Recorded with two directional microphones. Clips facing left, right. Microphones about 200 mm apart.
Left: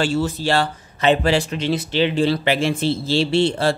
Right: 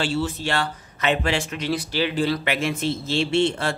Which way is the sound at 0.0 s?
40° left (ahead or behind).